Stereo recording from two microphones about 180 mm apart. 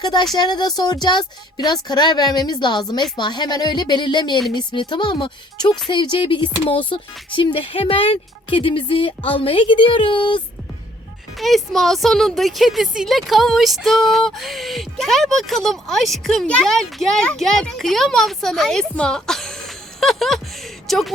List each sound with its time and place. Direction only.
0.0 s speech: 25° left (ahead or behind)
11.3 s speech: centre (ahead or behind)